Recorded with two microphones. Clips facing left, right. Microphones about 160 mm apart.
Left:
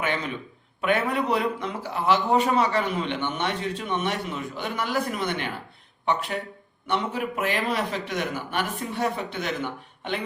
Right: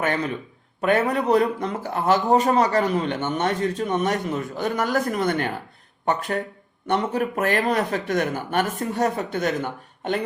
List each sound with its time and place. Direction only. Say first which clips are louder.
0.8 s a man's voice: right 3 dB; 40° right (ahead or behind)